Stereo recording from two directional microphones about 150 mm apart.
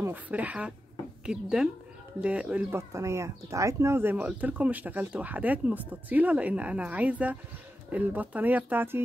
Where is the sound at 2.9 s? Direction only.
20° right (ahead or behind).